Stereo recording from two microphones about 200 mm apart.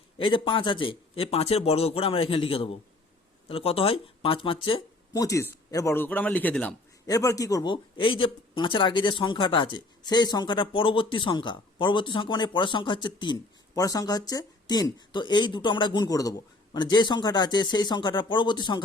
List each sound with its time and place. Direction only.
0.2 s a man's voice: 25° left (ahead or behind); by 6.7 s 5° left (ahead or behind)
7.1 s speech: 15° left (ahead or behind)